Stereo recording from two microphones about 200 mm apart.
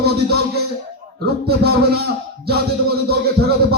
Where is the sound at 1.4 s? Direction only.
50° right (ahead or behind).